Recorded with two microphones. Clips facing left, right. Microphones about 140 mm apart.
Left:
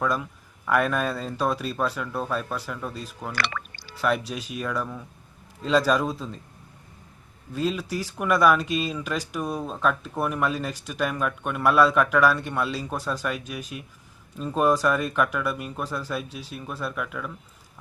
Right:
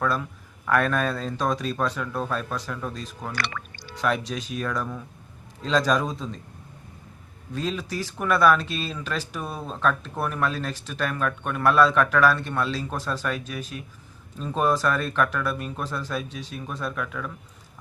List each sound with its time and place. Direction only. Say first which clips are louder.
0.0 s speech: even; 5° left (ahead or behind)
3.3 s speech: left 2 dB; 90° left
3.9 s speech: even; 5° left (ahead or behind)
7.5 s speech: left 2 dB; 10° left (ahead or behind)